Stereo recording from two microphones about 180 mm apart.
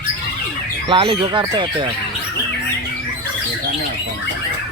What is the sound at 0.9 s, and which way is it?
Speech, 30° right (ahead or behind).